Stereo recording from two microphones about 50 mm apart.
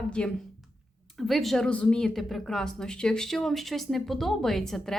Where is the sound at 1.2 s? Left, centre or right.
Centre.